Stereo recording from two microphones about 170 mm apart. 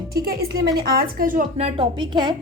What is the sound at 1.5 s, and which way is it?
Speech, 35° right (ahead or behind).